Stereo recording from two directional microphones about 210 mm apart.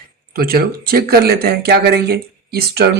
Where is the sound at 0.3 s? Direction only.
45° right (ahead or behind).